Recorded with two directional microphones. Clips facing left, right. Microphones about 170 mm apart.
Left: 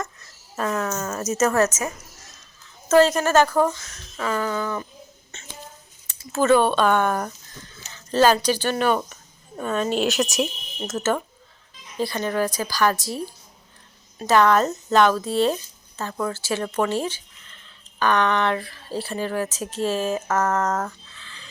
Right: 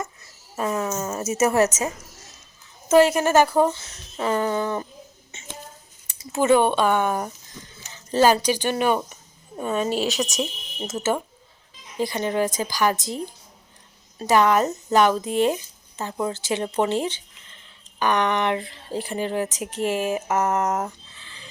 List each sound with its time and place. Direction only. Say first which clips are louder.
0.5 s a woman's voice: even; 15° right (ahead or behind)
2.9 s a woman's voice: even; 15° right (ahead or behind)
5.3 s a sound: right 4 dB; 15° right (ahead or behind)
6.1 s speech: even; 15° right (ahead or behind); by 10.4 s 5° left (ahead or behind)
10.8 s a woman's voice: left 1 dB; 10° right (ahead or behind)